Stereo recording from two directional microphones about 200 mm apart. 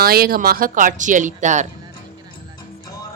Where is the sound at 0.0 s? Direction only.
50° right (ahead or behind).